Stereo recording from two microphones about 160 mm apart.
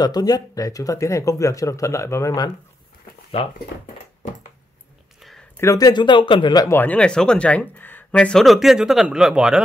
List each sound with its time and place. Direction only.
0.0 s speech: 25° left (ahead or behind)
5.6 s speech: 20° left (ahead or behind)
6.8 s speech: 10° left (ahead or behind)